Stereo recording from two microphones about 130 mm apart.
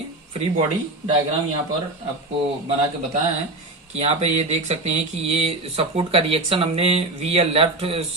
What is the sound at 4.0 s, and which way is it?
Speech, 60° right (ahead or behind).